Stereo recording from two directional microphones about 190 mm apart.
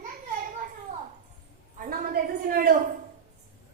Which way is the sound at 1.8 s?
50° right (ahead or behind).